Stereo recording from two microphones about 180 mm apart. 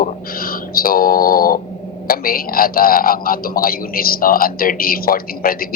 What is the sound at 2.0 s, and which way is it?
A man's voice, 55° left (ahead or behind).